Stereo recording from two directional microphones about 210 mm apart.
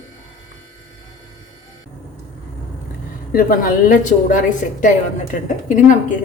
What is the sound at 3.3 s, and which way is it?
A woman's voice, 45° left (ahead or behind).